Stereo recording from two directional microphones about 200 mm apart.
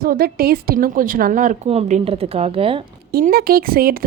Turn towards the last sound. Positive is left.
turn(degrees=-45)  # may be behind; listen again after turning